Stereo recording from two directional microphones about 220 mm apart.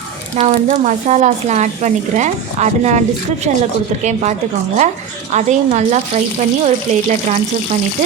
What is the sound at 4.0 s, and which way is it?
Speech, 30° right (ahead or behind).